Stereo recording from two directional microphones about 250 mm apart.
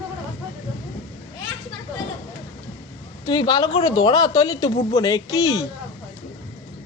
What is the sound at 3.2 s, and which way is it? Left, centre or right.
Speech, centre.